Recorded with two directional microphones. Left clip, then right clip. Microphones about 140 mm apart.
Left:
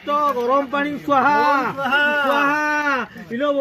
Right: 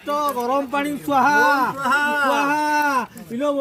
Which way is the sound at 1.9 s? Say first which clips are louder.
Left 3 dB; 20° left (ahead or behind).